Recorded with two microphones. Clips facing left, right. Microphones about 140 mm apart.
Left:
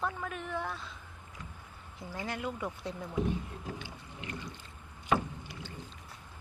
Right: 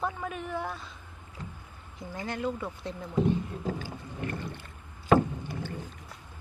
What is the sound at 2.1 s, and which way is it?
Speech, 5° left (ahead or behind).